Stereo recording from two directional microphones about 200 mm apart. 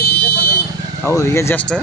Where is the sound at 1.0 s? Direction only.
15° left (ahead or behind).